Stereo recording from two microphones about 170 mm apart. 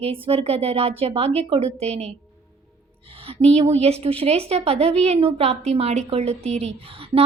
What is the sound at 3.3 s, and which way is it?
A woman's voice, 35° right (ahead or behind).